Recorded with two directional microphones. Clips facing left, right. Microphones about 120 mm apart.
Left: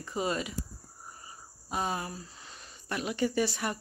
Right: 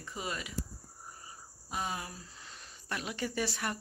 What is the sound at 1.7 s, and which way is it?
Speech, 35° left (ahead or behind).